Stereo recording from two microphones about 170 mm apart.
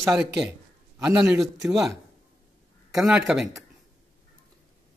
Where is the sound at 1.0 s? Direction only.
5° right (ahead or behind).